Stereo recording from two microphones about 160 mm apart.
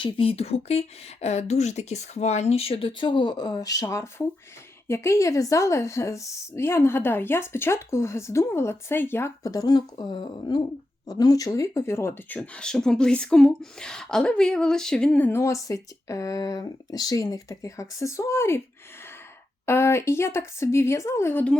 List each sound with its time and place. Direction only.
0.0 s speech: 35° left (ahead or behind); by 18.6 s 15° left (ahead or behind)
19.6 s speech: 15° left (ahead or behind)